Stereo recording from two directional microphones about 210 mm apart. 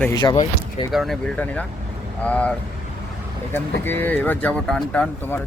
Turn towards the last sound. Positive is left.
turn(degrees=5)  # may be behind; listen again after turning